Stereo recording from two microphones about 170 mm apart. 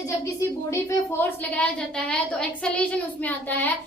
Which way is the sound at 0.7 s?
15° left (ahead or behind).